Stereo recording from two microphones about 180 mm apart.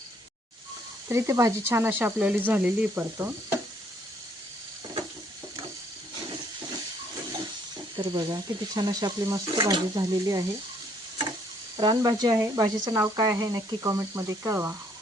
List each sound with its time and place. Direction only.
1.0 s speech: 15° right (ahead or behind)
7.9 s speech: 25° right (ahead or behind)
11.8 s speech: 25° right (ahead or behind)